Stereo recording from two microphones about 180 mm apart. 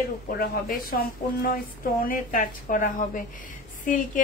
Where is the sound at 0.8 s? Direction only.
55° left (ahead or behind).